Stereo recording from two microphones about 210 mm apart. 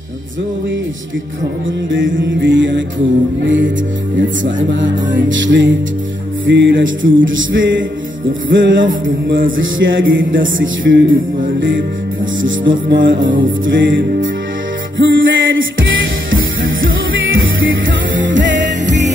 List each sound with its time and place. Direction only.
1.9 s music: 60° right (ahead or behind)
12.4 s music: 65° right (ahead or behind)